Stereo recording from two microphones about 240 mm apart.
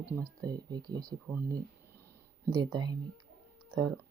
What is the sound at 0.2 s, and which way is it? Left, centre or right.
Speech, centre.